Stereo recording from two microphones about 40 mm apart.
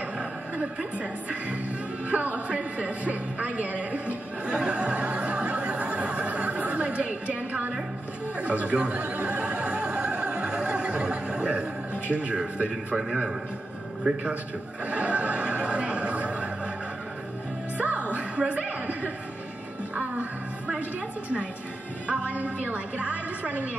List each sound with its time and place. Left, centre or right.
0.9 s a woman's voice: right
2.0 s music: right
2.4 s a woman's voice: right
4.5 s neigh: right
8.4 s opera: right
10.2 s a sound: right
12.1 s a woman's voice: right
12.9 s a man's voice: centre
14.9 s neigh: right
17.7 s music: right
18.4 s chuckle: right
20.0 s music: right
22.0 s a woman's voice: right